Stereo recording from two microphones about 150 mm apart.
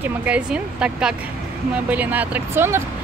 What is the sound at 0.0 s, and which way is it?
Speech, 5° right (ahead or behind).